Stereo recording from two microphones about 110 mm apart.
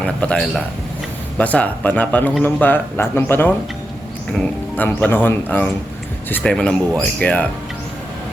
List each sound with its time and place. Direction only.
0.0 s speech: 10° left (ahead or behind)
4.8 s speech: 15° left (ahead or behind)